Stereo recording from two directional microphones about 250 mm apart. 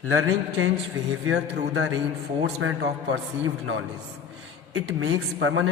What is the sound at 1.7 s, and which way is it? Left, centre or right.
A man's voice, right.